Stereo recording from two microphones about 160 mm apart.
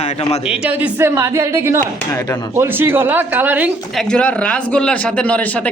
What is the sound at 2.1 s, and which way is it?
Speech, 20° left (ahead or behind).